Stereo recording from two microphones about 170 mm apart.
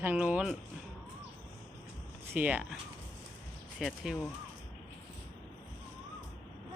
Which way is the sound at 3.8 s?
Centre (ahead or behind).